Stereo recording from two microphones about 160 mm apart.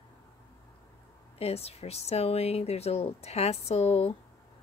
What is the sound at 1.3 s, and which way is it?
Speech, 40° left (ahead or behind).